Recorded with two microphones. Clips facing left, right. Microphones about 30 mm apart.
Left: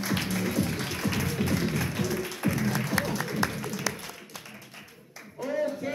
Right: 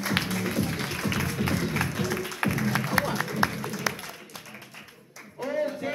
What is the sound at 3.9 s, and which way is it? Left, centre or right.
Applause, right.